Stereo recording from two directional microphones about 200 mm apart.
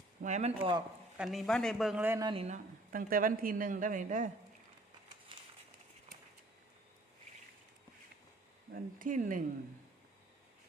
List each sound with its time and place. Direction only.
0.2 s speech: 35° right (ahead or behind)
1.2 s a man's voice: centre (ahead or behind)
2.2 s speech: 30° right (ahead or behind)
2.9 s speech: 45° right (ahead or behind)
8.7 s speech: 40° right (ahead or behind)